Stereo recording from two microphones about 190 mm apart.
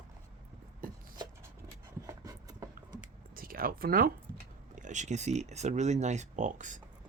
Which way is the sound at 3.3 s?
50° right (ahead or behind).